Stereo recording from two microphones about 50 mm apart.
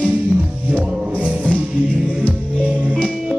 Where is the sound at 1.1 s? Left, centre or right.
Right.